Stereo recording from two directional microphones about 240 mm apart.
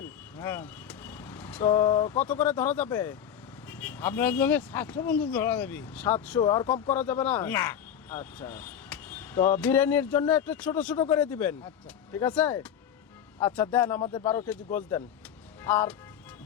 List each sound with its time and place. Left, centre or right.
0.0 s speech: centre
6.4 s speech: centre
14.0 s speech: left
14.3 s speech: centre